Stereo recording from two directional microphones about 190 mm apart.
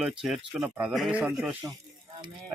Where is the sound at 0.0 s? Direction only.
5° right (ahead or behind).